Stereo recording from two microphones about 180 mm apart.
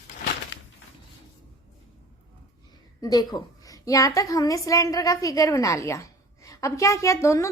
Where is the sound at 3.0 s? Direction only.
20° left (ahead or behind).